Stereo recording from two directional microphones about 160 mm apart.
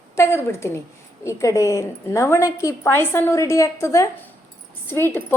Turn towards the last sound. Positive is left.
turn(degrees=15)  # may be behind; listen again after turning